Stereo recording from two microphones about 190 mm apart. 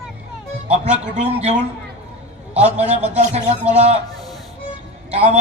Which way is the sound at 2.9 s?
35° right (ahead or behind).